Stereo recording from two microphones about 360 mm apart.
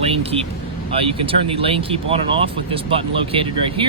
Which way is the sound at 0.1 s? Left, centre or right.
Centre.